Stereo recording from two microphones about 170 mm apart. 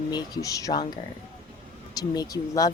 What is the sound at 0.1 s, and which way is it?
Speech, 20° left (ahead or behind).